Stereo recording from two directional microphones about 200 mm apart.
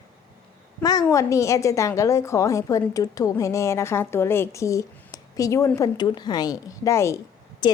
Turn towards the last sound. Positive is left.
turn(degrees=20)  # may be behind; listen again after turning